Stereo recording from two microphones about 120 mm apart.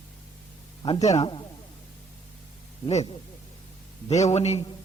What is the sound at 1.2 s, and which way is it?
Speech, 45° left (ahead or behind).